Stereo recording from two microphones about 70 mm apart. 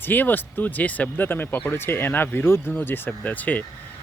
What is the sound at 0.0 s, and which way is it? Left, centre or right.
Speech, left.